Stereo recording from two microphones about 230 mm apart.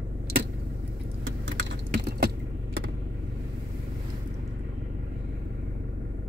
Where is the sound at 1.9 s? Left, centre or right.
Right.